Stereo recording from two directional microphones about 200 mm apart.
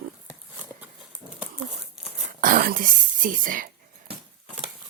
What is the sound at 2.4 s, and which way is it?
Speech, 45° right (ahead or behind).